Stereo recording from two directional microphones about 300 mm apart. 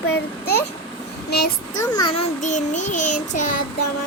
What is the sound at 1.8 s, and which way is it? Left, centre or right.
Child singing, centre.